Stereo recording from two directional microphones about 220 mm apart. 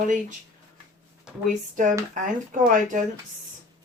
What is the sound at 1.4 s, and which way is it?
Speech, 35° right (ahead or behind).